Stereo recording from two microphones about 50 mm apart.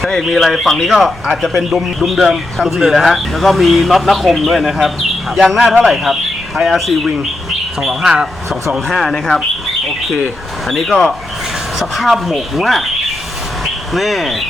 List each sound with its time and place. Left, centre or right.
0.0 s speech: centre
9.0 s speech: centre
10.7 s speech: centre
13.9 s speech: centre